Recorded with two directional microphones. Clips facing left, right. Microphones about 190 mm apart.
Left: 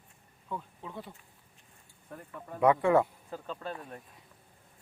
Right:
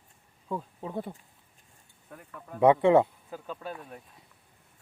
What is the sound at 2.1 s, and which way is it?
Speech, centre (ahead or behind).